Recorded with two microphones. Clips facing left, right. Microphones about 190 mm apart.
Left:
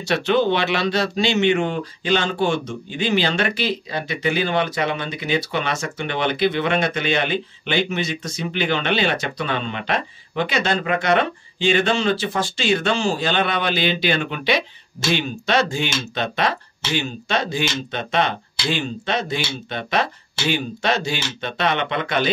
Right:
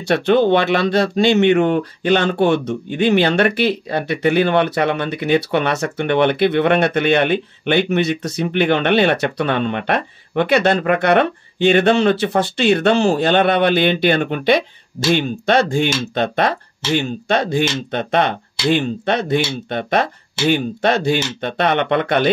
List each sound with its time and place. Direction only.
0.0 s speech: 55° right (ahead or behind)